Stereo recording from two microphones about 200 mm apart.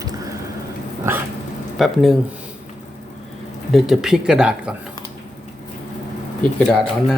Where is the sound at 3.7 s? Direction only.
Centre (ahead or behind).